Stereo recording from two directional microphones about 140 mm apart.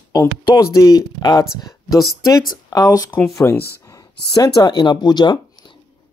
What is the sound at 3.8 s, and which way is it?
Speech, 25° left (ahead or behind).